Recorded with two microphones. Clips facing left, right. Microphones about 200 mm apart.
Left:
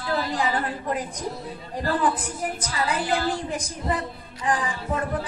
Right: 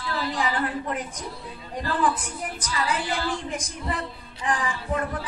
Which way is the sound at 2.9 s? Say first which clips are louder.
Left 4 dB; 35° left (ahead or behind).